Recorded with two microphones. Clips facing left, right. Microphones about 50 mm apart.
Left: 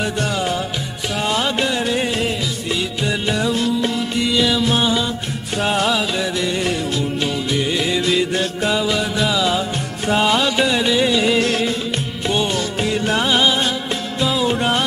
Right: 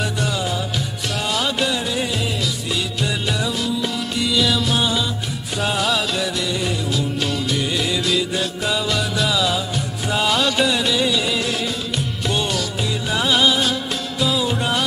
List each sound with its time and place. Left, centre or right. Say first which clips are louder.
1.3 s music: left 1 dB; left
7.5 s music: left 2 dB; centre
8.0 s music: left 3 dB; left
8.7 s music: left 1 dB; centre
13.2 s music: right 2 dB; centre